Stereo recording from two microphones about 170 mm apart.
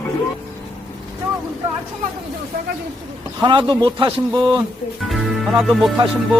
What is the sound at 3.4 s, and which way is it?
A man's voice, 30° right (ahead or behind).